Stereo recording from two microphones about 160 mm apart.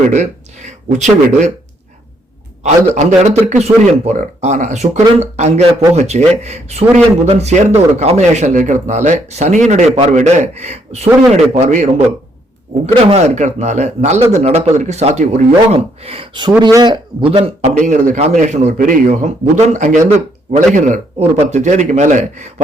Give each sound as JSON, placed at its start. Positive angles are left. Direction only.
{"t": 0.1, "sound": "speech", "side_deg": -45}
{"t": 2.6, "sound": "a man's voice", "side_deg": -45}
{"t": 13.1, "sound": "a man's voice", "side_deg": -45}